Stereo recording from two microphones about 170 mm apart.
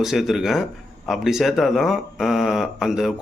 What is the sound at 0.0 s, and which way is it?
Speech, centre (ahead or behind).